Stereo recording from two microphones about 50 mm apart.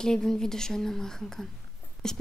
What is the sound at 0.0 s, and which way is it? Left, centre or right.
Speech, centre.